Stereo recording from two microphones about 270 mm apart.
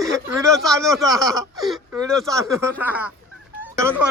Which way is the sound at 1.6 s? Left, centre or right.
Centre.